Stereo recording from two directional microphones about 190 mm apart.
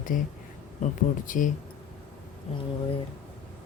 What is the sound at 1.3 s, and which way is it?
Speech, 45° left (ahead or behind).